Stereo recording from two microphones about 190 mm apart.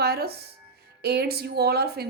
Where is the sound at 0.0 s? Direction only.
55° right (ahead or behind).